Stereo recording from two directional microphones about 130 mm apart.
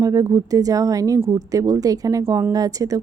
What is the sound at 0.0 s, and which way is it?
Speech, 25° right (ahead or behind).